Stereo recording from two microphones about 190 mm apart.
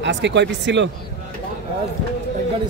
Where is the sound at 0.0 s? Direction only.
70° right (ahead or behind).